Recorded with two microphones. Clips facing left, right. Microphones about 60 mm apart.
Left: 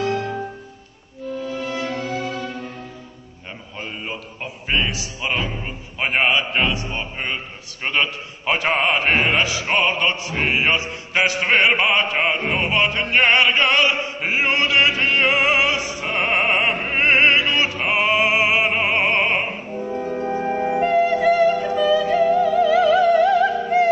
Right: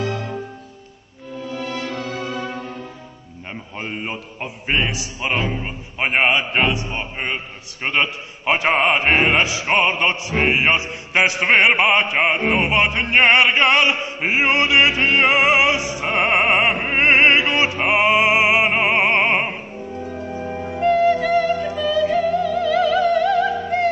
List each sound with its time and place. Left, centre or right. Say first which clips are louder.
3.7 s speech: right 2 dB; right
10.3 s music: right 3 dB; centre
20.2 s music: left 8 dB; left
20.8 s music: right 2 dB; centre